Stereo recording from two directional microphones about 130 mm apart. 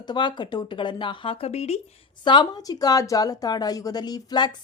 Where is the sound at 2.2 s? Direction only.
35° left (ahead or behind).